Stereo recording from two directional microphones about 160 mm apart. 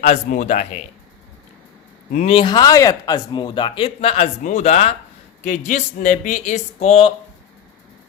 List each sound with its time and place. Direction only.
0.0 s speech: 55° left (ahead or behind)
2.1 s speech: 35° left (ahead or behind)